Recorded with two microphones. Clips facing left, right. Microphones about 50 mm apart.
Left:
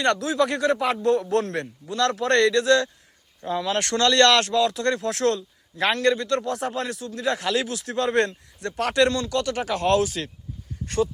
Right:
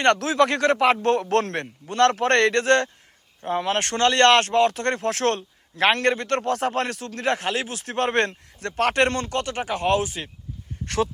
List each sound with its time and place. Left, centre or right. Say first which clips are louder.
0.0 s speech: right 3 dB; right
7.4 s a man's voice: left 2 dB; right
10.8 s speech: even; right